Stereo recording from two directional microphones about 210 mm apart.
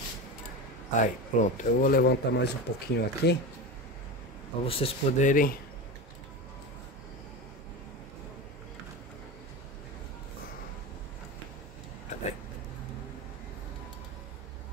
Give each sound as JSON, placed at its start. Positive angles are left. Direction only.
{"t": 0.9, "sound": "speech", "side_deg": 35}
{"t": 4.6, "sound": "speech", "side_deg": 25}
{"t": 12.1, "sound": "a sound", "side_deg": 30}